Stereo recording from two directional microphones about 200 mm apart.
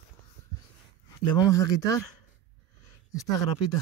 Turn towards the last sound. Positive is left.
turn(degrees=15)  # may be behind; listen again after turning